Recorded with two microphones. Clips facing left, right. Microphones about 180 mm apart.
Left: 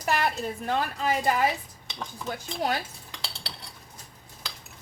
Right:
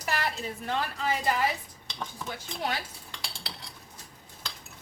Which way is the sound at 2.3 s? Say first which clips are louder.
Left 5 dB; 45° left (ahead or behind).